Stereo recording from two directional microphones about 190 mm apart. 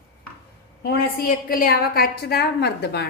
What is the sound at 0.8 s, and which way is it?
A woman's voice, 55° left (ahead or behind).